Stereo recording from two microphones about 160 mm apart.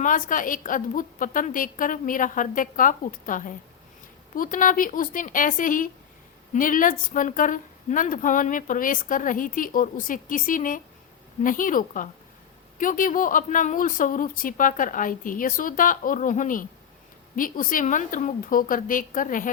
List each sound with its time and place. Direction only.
0.0 s a woman's voice: 55° left (ahead or behind)